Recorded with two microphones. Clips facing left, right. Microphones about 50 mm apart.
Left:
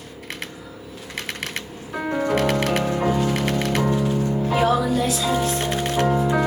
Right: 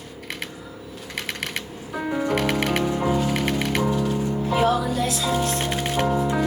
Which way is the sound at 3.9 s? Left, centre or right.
Centre.